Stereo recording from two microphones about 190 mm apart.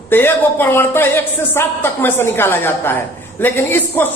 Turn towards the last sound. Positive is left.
turn(degrees=10)  # may be behind; listen again after turning